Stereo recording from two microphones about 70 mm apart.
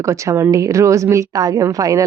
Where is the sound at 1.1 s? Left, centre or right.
Right.